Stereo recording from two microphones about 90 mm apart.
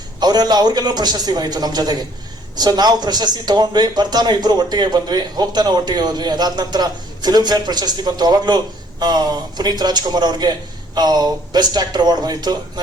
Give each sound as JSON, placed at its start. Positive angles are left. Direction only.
{"t": 0.2, "sound": "a man's voice", "side_deg": -50}